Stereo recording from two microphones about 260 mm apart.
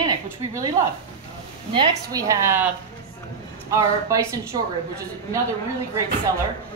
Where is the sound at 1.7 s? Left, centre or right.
Centre.